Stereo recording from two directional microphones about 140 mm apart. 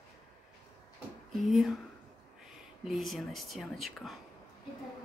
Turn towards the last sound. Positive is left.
turn(degrees=0)  # may be behind; listen again after turning